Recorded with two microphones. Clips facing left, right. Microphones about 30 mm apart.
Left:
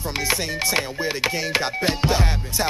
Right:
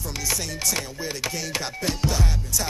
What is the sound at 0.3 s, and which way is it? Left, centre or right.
Speech, left.